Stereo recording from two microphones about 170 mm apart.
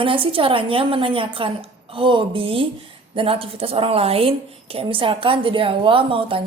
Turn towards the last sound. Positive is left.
turn(degrees=-30)  # may be behind; listen again after turning